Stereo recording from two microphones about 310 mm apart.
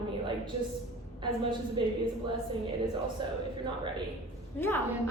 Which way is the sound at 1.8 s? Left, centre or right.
Centre.